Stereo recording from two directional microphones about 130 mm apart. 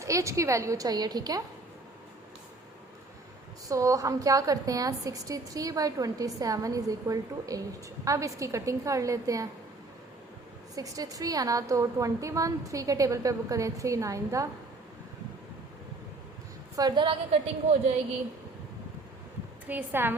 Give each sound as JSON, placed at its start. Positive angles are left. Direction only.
{"t": 0.0, "sound": "a woman's voice", "side_deg": -25}
{"t": 3.7, "sound": "a woman's voice", "side_deg": -25}
{"t": 10.8, "sound": "a woman's voice", "side_deg": -25}
{"t": 16.7, "sound": "a woman's voice", "side_deg": -35}
{"t": 19.6, "sound": "a woman's voice", "side_deg": -15}